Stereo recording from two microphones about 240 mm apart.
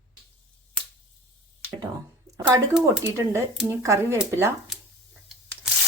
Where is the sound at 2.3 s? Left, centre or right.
Centre.